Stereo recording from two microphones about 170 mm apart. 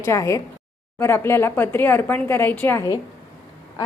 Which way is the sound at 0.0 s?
15° left (ahead or behind).